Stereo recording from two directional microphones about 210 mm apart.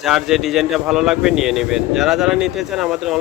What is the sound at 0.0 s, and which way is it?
Speech, centre (ahead or behind).